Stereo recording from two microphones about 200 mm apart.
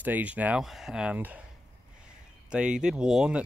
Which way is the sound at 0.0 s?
10° right (ahead or behind).